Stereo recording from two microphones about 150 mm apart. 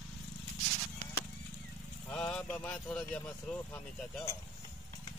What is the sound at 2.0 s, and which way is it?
Speech, 10° left (ahead or behind).